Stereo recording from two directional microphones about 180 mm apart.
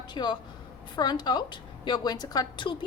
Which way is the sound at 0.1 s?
25° left (ahead or behind).